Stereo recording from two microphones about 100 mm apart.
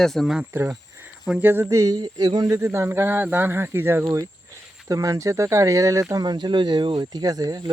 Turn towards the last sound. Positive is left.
turn(degrees=-40)  # may be behind; listen again after turning